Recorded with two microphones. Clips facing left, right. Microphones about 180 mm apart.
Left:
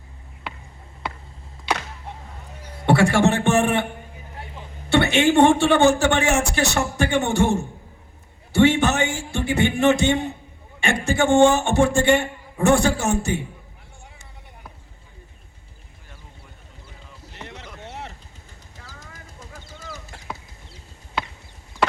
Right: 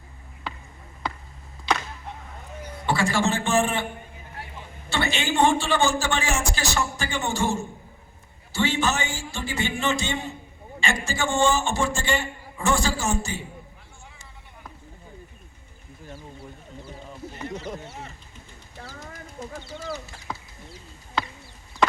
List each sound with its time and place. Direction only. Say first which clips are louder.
2.8 s a man's voice: left 7 dB; 65° left (ahead or behind)
4.9 s a man's voice: left 9 dB; 65° left (ahead or behind)
8.5 s a sound: left 7 dB; 65° left (ahead or behind)
10.8 s a man's voice: left 6 dB; 65° left (ahead or behind)
17.5 s a sound: right 8 dB; 40° right (ahead or behind)
19.4 s bird: right 10 dB; 45° right (ahead or behind)